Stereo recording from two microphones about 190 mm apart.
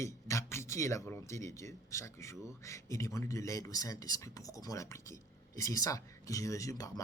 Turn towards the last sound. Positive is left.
turn(degrees=20)  # may be behind; listen again after turning